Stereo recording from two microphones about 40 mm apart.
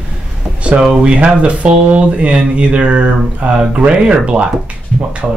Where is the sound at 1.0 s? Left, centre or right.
Right.